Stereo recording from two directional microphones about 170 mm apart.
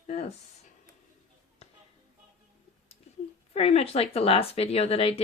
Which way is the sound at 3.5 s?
35° left (ahead or behind).